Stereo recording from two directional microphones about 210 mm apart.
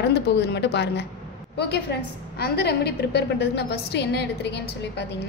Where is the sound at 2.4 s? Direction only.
50° left (ahead or behind).